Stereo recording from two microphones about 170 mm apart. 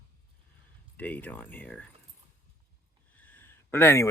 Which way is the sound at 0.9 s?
10° left (ahead or behind).